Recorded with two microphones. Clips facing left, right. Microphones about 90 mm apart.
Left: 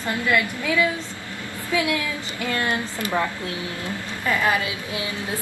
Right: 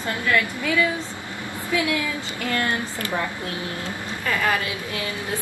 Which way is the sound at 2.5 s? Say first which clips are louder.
Even; 20° left (ahead or behind).